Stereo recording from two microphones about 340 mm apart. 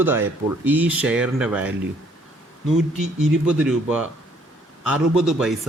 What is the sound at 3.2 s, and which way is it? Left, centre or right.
A man's voice, centre.